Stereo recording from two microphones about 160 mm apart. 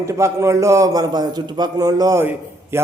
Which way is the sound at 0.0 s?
20° right (ahead or behind).